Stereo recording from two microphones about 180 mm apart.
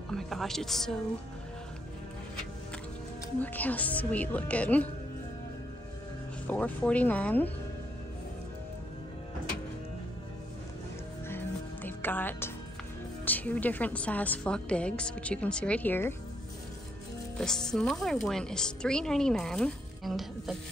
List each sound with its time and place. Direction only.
0.1 s speech: centre (ahead or behind)
3.3 s a woman's voice: 10° left (ahead or behind)
6.4 s a woman's voice: 10° left (ahead or behind)
11.2 s music: 10° left (ahead or behind)
13.2 s a woman's voice: 10° left (ahead or behind)
17.4 s a woman's voice: 5° left (ahead or behind)